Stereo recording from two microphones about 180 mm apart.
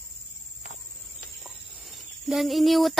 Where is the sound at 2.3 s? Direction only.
Centre (ahead or behind).